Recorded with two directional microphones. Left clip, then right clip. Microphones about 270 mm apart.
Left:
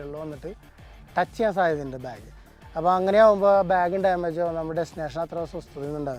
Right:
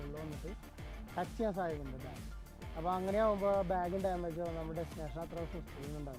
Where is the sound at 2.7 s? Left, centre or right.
Left.